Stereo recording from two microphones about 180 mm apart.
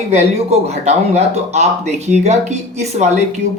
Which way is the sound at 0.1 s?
35° right (ahead or behind).